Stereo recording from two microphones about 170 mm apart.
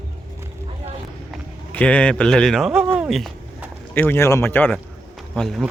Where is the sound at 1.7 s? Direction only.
5° left (ahead or behind).